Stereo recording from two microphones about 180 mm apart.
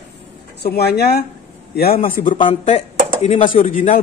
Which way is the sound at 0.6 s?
65° left (ahead or behind).